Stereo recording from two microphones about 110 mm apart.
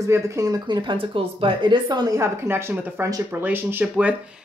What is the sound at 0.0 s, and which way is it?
Speech, 30° right (ahead or behind).